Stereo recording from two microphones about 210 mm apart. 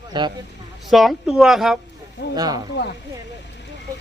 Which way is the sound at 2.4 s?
20° right (ahead or behind).